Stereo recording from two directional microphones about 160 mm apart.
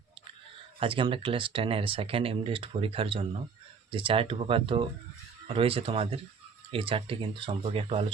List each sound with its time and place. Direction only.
0.8 s speech: 35° right (ahead or behind)